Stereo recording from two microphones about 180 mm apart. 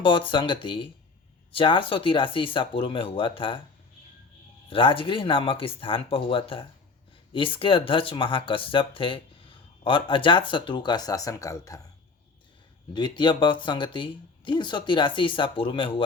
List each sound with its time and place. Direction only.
0.0 s speech: 30° left (ahead or behind)
4.7 s speech: 30° left (ahead or behind)
12.9 s speech: 25° left (ahead or behind)